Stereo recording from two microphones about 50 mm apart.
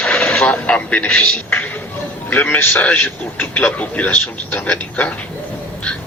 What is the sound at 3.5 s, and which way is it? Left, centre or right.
A man's voice, left.